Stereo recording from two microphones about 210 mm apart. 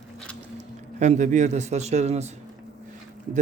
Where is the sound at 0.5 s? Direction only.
35° right (ahead or behind).